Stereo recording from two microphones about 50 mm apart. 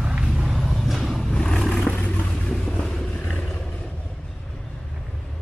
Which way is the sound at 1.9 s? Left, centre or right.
Left.